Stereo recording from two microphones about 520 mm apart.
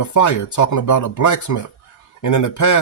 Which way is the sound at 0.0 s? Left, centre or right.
Left.